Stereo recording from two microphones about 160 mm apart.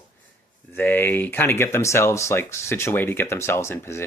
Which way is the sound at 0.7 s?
10° left (ahead or behind).